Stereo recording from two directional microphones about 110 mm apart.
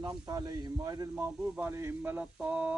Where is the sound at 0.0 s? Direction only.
35° right (ahead or behind).